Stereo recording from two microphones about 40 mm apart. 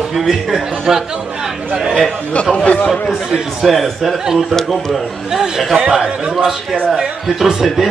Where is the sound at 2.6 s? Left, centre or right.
Left.